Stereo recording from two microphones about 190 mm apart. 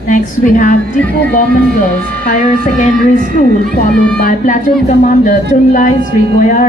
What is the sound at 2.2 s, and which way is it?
Speech, 40° left (ahead or behind).